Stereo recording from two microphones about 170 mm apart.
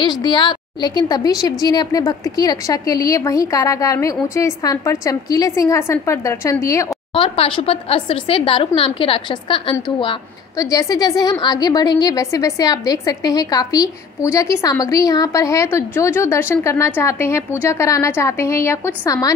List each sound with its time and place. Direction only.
0.0 s a woman's voice: 25° left (ahead or behind)
7.2 s speech: 30° left (ahead or behind)
10.6 s a woman's voice: 20° left (ahead or behind)